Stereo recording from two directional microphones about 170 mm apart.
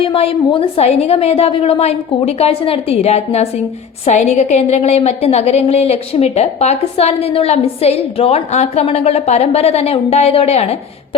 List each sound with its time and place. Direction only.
0.0 s a woman's voice: 35° left (ahead or behind)